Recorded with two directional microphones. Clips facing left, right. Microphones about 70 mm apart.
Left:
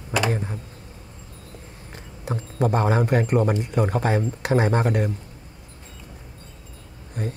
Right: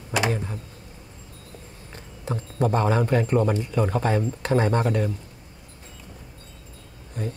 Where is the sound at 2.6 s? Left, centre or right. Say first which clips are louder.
Left 1 dB; left.